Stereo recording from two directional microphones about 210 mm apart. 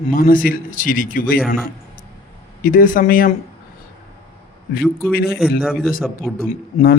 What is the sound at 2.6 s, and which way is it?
Speech, 40° left (ahead or behind).